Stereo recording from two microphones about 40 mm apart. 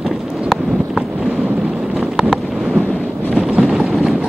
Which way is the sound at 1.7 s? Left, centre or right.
Right.